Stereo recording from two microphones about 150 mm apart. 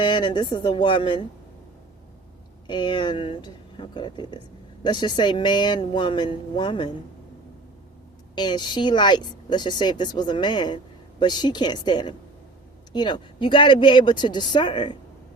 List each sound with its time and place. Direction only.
0.0 s speech: 30° left (ahead or behind)
2.6 s speech: 30° left (ahead or behind)
8.4 s speech: 30° left (ahead or behind)